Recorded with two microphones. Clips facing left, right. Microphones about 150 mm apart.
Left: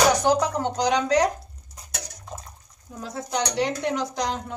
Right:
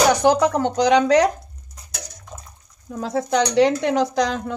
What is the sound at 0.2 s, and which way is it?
Speech, 75° right (ahead or behind).